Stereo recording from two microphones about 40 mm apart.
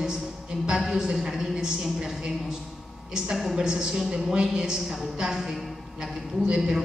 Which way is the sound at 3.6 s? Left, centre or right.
Centre.